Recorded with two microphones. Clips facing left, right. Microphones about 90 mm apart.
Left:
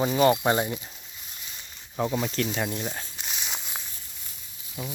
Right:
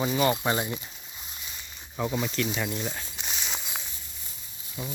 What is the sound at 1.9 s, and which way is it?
Speech, 15° left (ahead or behind).